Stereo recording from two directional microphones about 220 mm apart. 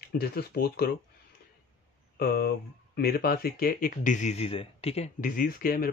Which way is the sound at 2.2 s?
45° left (ahead or behind).